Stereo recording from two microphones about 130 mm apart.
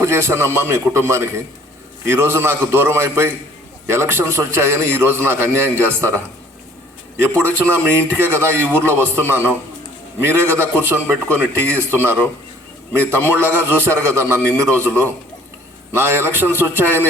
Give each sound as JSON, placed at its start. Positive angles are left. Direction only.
{"t": 0.0, "sound": "a man's voice", "side_deg": -20}
{"t": 7.2, "sound": "speech", "side_deg": -15}
{"t": 13.1, "sound": "speech", "side_deg": -15}